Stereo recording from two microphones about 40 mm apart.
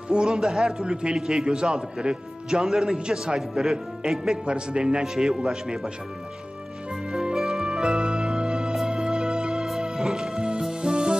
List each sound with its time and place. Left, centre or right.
0.1 s a man's voice: centre
4.5 s speech: right
5.0 s a man's voice: centre
6.9 s music: centre
9.7 s music: centre